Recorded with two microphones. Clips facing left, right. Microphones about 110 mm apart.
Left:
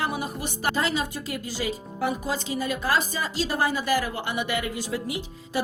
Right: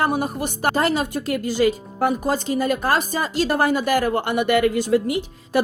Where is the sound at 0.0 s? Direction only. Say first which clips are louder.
Right 7 dB; 50° right (ahead or behind).